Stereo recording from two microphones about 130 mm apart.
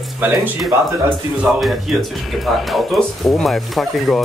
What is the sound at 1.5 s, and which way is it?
Speech, 10° right (ahead or behind).